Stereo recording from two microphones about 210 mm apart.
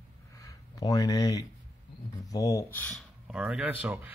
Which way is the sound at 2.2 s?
15° left (ahead or behind).